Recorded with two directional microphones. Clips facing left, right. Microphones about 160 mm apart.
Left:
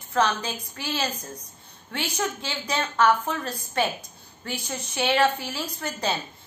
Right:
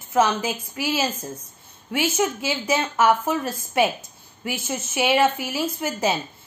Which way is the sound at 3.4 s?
5° right (ahead or behind).